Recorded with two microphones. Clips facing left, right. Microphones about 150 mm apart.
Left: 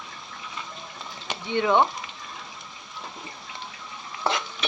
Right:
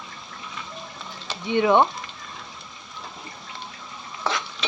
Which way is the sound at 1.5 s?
15° right (ahead or behind).